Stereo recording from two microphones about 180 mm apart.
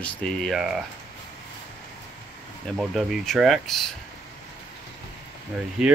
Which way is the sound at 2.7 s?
Centre (ahead or behind).